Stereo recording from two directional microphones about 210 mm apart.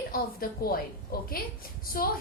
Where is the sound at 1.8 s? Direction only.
45° left (ahead or behind).